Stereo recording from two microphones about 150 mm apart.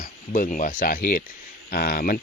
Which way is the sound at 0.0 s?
60° left (ahead or behind).